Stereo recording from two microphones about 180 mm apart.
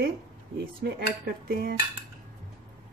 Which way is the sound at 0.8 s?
55° right (ahead or behind).